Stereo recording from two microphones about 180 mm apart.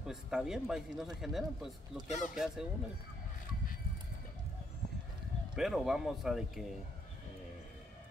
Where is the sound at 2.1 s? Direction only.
40° left (ahead or behind).